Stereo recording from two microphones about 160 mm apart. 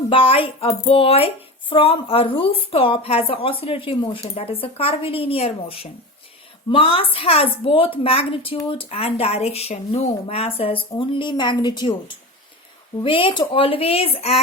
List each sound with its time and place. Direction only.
0.1 s a woman's voice: 35° left (ahead or behind)